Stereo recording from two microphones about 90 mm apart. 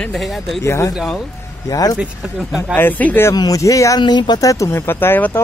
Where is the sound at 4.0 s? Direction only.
55° left (ahead or behind).